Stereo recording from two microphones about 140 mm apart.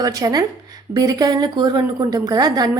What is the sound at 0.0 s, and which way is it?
A woman's voice, 25° right (ahead or behind).